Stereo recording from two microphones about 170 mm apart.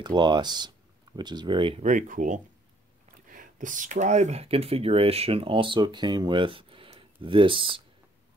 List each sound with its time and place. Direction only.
0.0 s speech: 25° right (ahead or behind)
1.8 s speech: 50° right (ahead or behind); by 7.8 s 30° right (ahead or behind)